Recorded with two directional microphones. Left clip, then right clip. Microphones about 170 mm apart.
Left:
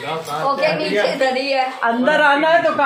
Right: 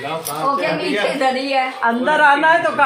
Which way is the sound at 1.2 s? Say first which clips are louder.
Even; 30° left (ahead or behind).